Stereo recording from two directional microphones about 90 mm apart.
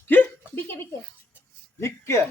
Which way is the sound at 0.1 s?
25° left (ahead or behind).